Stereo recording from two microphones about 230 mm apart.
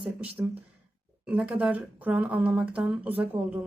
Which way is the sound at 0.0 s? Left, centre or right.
Centre.